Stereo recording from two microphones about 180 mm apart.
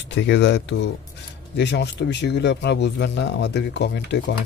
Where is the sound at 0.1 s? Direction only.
75° left (ahead or behind).